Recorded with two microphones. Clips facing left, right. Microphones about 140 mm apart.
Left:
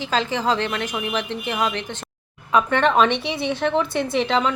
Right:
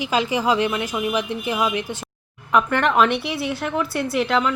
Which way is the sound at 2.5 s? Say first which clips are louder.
Left 1 dB; 20° left (ahead or behind).